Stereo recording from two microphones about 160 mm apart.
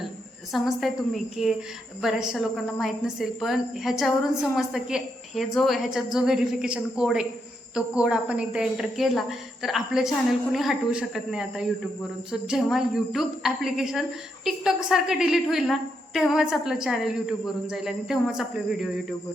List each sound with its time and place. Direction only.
0.5 s a woman's voice: centre (ahead or behind)